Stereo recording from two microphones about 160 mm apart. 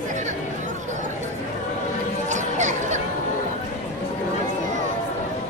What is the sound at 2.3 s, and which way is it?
Chatter, 50° right (ahead or behind).